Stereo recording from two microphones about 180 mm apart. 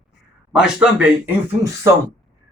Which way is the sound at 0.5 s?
5° right (ahead or behind).